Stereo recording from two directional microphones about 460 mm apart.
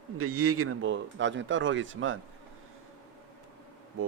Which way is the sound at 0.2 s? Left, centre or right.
Right.